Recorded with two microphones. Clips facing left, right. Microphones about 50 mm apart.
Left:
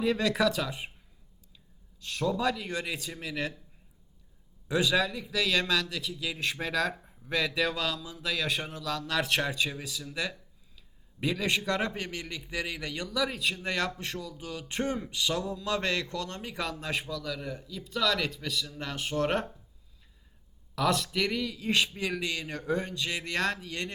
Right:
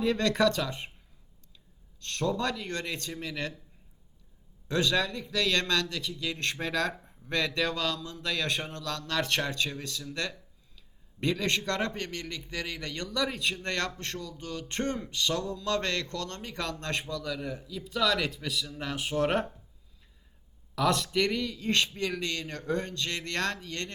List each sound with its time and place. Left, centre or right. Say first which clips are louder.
0.0 s a man's voice: right 1 dB; centre
2.0 s a man's voice: even; centre
4.7 s a man's voice: left 1 dB; centre
20.7 s a man's voice: right 1 dB; centre